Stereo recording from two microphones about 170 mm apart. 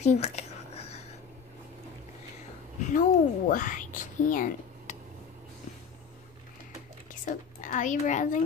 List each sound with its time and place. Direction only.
0.0 s a sound: 40° left (ahead or behind)
2.8 s speech: 50° left (ahead or behind)
7.2 s a woman's voice: 50° left (ahead or behind)